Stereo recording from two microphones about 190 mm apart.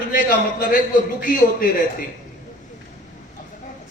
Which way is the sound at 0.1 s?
45° left (ahead or behind).